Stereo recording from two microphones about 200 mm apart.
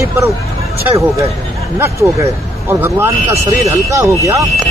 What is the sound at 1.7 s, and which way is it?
Speech, 15° right (ahead or behind).